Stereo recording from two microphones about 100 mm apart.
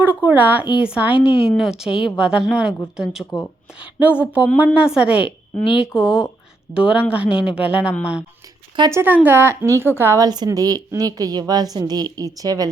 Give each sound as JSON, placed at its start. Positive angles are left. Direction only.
{"t": 0.0, "sound": "a woman's voice", "side_deg": -15}
{"t": 8.9, "sound": "a woman's voice", "side_deg": -25}
{"t": 10.2, "sound": "a woman's voice", "side_deg": -40}